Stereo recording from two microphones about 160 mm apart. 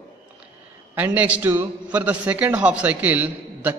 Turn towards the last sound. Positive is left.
turn(degrees=-10)  # may be behind; listen again after turning